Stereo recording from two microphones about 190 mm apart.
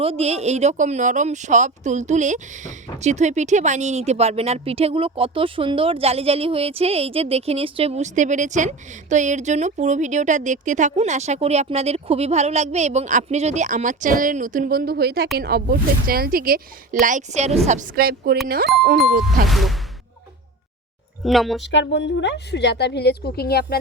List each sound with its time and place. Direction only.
0.0 s speech: 30° right (ahead or behind); by 19.5 s 50° right (ahead or behind)
19.5 s speech: centre (ahead or behind)
21.2 s speech: centre (ahead or behind)
21.6 s speech: 70° left (ahead or behind); by 23.7 s 55° left (ahead or behind)